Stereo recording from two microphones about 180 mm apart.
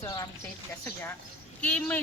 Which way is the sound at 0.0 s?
20° left (ahead or behind).